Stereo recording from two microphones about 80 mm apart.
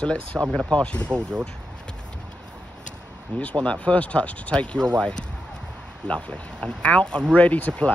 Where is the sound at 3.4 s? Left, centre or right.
Centre.